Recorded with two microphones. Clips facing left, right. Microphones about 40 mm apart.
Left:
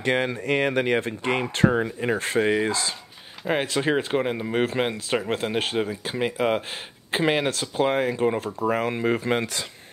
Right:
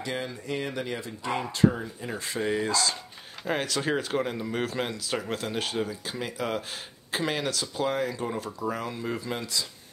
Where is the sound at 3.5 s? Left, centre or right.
Left.